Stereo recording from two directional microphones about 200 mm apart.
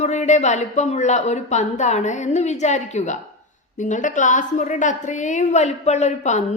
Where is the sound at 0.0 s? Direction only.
35° left (ahead or behind).